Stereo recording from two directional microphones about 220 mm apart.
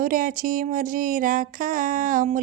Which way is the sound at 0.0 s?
40° right (ahead or behind).